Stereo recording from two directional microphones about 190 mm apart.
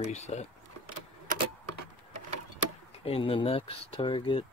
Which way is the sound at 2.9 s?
30° left (ahead or behind).